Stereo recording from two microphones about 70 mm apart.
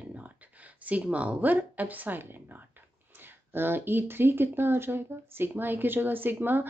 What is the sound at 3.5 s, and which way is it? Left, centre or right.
Speech, right.